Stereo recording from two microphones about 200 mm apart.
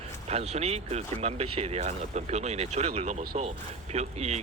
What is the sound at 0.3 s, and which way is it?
Speech, 30° right (ahead or behind).